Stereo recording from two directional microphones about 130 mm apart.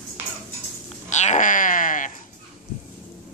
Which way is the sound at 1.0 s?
65° left (ahead or behind).